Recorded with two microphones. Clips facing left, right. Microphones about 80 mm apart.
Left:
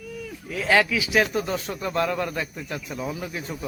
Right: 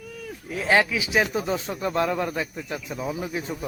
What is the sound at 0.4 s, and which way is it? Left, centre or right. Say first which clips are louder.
Speech: even; right.